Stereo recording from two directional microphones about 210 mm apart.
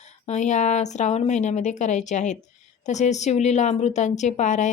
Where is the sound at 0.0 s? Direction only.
35° left (ahead or behind).